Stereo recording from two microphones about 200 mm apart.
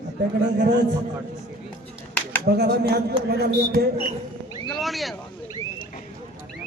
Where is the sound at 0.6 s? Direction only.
55° right (ahead or behind).